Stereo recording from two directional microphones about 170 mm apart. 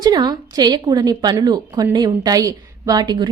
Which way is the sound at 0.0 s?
25° right (ahead or behind).